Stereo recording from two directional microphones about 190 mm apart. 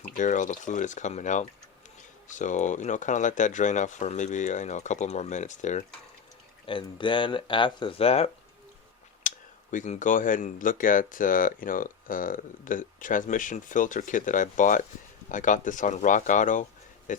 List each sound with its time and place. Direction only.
0.0 s speech: 40° left (ahead or behind)
6.7 s speech: 25° left (ahead or behind)
9.2 s clicking: 40° left (ahead or behind)
9.7 s speech: 40° left (ahead or behind)